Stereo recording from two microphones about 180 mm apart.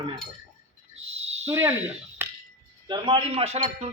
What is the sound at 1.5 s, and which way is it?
Speech, 15° right (ahead or behind).